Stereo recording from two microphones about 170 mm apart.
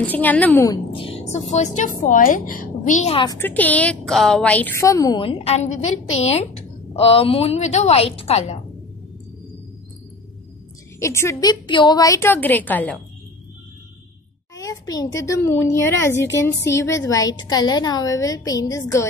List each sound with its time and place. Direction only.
0.0 s a woman's voice: 10° left (ahead or behind)
0.7 s a woman's voice: 35° left (ahead or behind)
3.3 s a woman's voice: 10° left (ahead or behind)
5.2 s a woman's voice: 35° left (ahead or behind)
11.0 s a woman's voice: 15° left (ahead or behind)
11.6 s a woman's voice: 30° left (ahead or behind); by 13.0 s 10° left (ahead or behind)
14.5 s a woman's voice: 20° left (ahead or behind)